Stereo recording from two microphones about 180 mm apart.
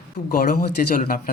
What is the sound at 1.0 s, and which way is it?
Speech, 50° left (ahead or behind).